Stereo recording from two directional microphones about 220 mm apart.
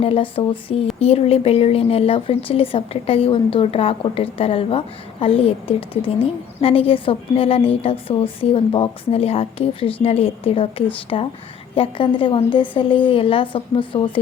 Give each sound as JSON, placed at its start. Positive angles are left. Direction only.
{"t": 0.0, "sound": "a woman's voice", "side_deg": 25}